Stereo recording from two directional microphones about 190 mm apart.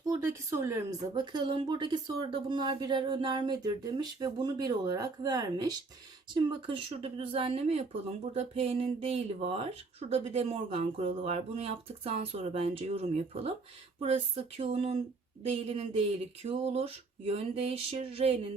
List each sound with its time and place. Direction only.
0.0 s speech: 15° right (ahead or behind); by 18.3 s 30° right (ahead or behind)